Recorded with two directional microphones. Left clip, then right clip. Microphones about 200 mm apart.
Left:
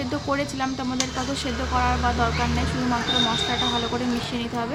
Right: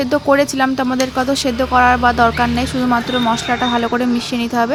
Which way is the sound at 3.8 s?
40° right (ahead or behind).